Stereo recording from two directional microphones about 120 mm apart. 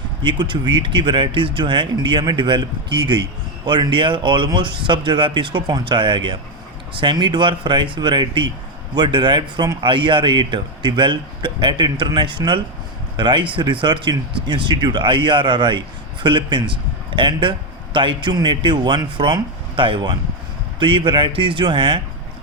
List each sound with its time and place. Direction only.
0.2 s speech: 40° right (ahead or behind)